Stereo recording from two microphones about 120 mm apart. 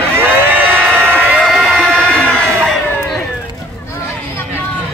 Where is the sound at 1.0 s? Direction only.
15° right (ahead or behind).